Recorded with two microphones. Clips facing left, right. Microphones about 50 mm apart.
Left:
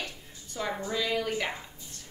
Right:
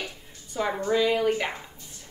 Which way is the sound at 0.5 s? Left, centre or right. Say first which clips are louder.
Right 7 dB; right.